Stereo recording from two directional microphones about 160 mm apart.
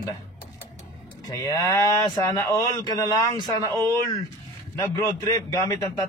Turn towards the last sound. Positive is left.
turn(degrees=20)  # may be behind; listen again after turning